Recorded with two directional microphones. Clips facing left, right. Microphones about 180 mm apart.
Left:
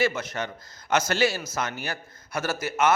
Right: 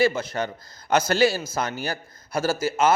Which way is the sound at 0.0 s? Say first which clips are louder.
Right 4 dB; 30° right (ahead or behind).